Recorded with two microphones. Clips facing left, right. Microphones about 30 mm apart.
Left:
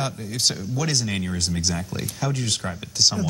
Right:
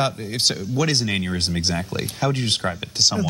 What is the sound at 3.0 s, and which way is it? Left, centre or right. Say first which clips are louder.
Speech: even; centre.